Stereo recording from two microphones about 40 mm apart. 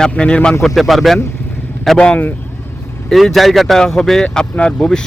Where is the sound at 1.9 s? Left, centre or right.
Left.